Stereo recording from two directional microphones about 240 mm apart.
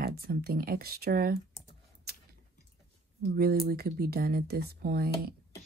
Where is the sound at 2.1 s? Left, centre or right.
Right.